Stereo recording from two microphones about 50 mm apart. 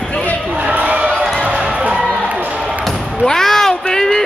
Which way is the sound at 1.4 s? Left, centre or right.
Right.